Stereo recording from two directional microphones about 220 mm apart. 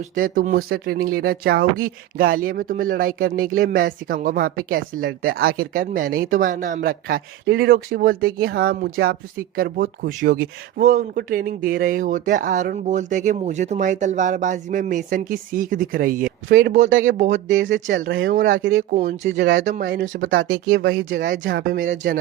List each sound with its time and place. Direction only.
0.0 s speech: 40° right (ahead or behind)
16.5 s speech: 55° right (ahead or behind)
16.7 s speech: 35° right (ahead or behind)
17.3 s speech: 55° right (ahead or behind)
18.9 s speech: 30° right (ahead or behind)
19.2 s speech: 55° right (ahead or behind)
19.6 s speech: 40° right (ahead or behind)
20.5 s speech: 60° right (ahead or behind)
21.1 s speech: 40° right (ahead or behind)
21.3 s speech: 50° right (ahead or behind)